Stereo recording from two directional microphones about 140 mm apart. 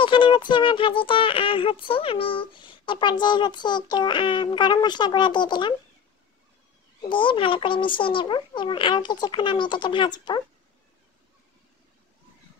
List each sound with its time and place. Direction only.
0.0 s speech: 35° left (ahead or behind)
7.0 s speech: 35° left (ahead or behind)